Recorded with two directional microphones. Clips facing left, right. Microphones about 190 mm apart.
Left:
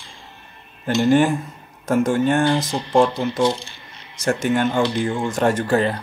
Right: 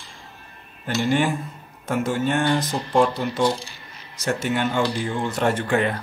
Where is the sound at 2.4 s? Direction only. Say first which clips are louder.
Left 2 dB; centre (ahead or behind).